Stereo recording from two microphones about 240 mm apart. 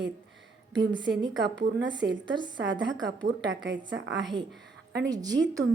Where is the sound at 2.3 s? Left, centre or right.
Centre.